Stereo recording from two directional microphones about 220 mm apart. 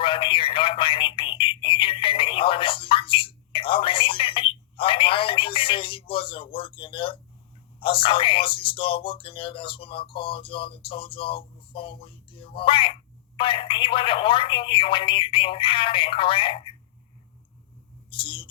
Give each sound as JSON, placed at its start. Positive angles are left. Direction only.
{"t": 0.0, "sound": "telephone", "side_deg": 25}
{"t": 7.8, "sound": "speech", "side_deg": 25}
{"t": 18.1, "sound": "a sound", "side_deg": 25}